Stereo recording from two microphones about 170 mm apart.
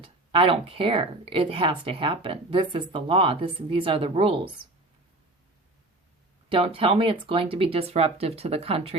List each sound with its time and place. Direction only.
0.0 s speech: 30° right (ahead or behind)
6.5 s speech: 35° right (ahead or behind)